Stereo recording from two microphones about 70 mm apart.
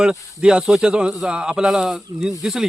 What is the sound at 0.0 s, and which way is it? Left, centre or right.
A man's voice, centre.